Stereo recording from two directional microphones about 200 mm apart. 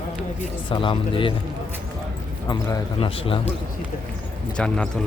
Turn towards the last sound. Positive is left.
turn(degrees=5)  # may be behind; listen again after turning